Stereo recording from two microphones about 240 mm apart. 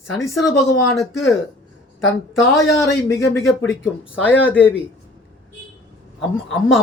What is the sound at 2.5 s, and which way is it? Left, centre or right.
Speech, centre.